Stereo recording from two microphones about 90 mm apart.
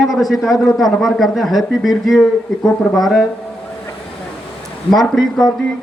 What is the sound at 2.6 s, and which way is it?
Speech, 40° left (ahead or behind).